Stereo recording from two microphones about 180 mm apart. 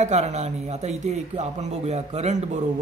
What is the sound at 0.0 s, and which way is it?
Speech, 40° right (ahead or behind).